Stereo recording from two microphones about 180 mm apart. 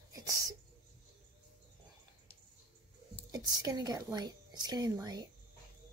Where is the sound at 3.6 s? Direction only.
20° right (ahead or behind).